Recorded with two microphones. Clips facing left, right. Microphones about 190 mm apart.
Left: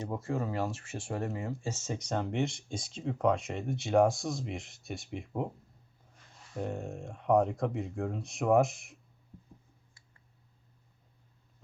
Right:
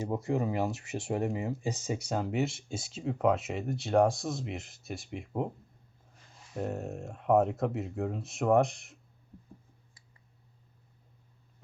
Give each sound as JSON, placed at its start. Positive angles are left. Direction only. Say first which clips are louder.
{"t": 0.0, "sound": "speech", "louder": "right 4 dB", "side_deg": -20}